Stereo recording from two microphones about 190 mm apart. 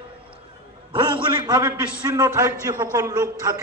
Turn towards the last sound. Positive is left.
turn(degrees=-15)  # may be behind; listen again after turning